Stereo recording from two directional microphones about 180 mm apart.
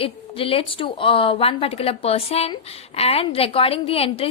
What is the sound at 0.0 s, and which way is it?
A woman's voice, 30° left (ahead or behind).